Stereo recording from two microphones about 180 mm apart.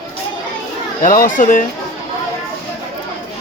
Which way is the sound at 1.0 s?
50° left (ahead or behind).